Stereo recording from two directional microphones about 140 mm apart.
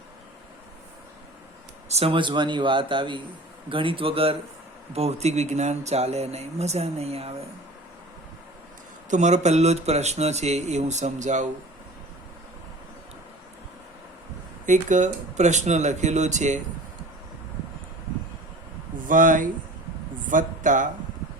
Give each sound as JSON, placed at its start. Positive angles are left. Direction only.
{"t": 1.9, "sound": "speech", "side_deg": -45}
{"t": 9.0, "sound": "speech", "side_deg": -60}
{"t": 14.7, "sound": "speech", "side_deg": -60}
{"t": 19.0, "sound": "speech", "side_deg": -70}